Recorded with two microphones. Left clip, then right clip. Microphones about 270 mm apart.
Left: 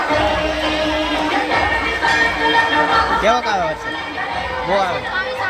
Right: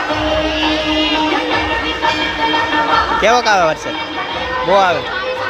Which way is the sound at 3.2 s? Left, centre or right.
Centre.